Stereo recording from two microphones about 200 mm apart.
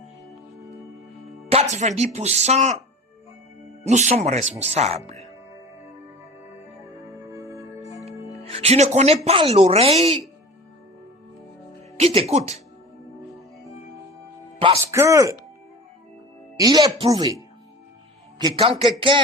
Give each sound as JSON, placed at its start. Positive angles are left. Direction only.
{"t": 1.7, "sound": "speech", "side_deg": -35}
{"t": 3.8, "sound": "speech", "side_deg": -35}
{"t": 7.1, "sound": "music", "side_deg": -15}
{"t": 8.0, "sound": "speech", "side_deg": -30}
{"t": 11.9, "sound": "speech", "side_deg": -30}
{"t": 14.6, "sound": "music", "side_deg": -25}
{"t": 14.9, "sound": "speech", "side_deg": -15}
{"t": 16.6, "sound": "speech", "side_deg": -20}